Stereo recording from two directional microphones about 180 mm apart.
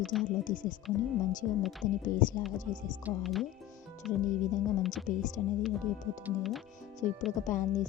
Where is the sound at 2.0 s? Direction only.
50° left (ahead or behind).